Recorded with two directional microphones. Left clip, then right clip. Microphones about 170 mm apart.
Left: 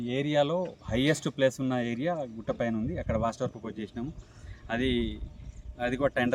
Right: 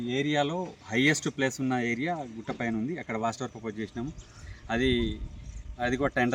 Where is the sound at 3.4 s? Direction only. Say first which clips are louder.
Left 1 dB; 35° left (ahead or behind).